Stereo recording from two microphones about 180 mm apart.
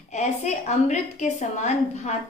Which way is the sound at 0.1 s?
40° left (ahead or behind).